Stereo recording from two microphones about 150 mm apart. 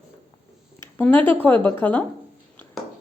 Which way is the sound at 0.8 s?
10° left (ahead or behind).